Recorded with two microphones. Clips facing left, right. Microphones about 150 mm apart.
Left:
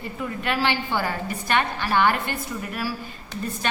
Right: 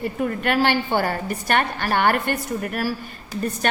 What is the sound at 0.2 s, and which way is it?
A woman's voice, 55° right (ahead or behind).